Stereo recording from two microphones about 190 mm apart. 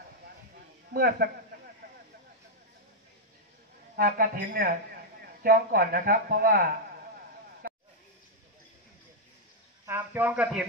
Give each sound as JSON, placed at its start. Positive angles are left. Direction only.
{"t": 0.9, "sound": "a man's voice", "side_deg": -55}
{"t": 3.9, "sound": "speech", "side_deg": -50}
{"t": 9.8, "sound": "speech", "side_deg": -10}